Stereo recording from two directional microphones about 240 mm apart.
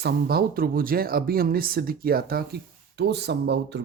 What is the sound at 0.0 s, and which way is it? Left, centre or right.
Speech, right.